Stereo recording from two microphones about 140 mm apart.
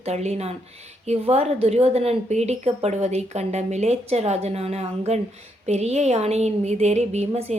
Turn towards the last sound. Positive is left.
turn(degrees=-50)  # may be behind; listen again after turning